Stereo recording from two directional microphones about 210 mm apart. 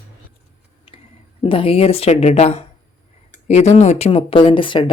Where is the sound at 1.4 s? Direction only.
25° left (ahead or behind).